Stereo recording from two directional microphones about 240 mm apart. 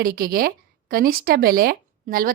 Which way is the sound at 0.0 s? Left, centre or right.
Right.